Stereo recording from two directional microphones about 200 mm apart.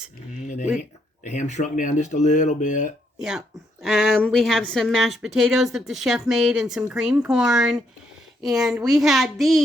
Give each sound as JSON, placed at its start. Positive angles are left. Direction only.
{"t": 0.8, "sound": "speech", "side_deg": 35}
{"t": 3.2, "sound": "a woman's voice", "side_deg": -5}